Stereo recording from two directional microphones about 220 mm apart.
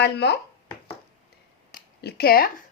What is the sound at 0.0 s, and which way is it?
Speech, 50° left (ahead or behind).